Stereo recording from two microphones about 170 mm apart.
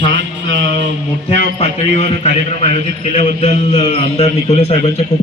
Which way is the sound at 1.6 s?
40° left (ahead or behind).